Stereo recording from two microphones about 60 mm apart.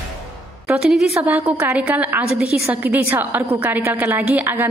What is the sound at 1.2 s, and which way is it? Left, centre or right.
A woman's voice, right.